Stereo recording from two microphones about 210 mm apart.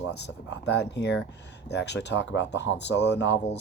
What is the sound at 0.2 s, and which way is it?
Speech, 55° left (ahead or behind).